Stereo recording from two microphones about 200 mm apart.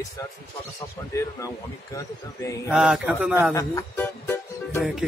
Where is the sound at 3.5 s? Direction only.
15° left (ahead or behind).